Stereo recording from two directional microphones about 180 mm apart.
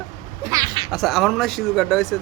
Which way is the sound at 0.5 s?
25° right (ahead or behind).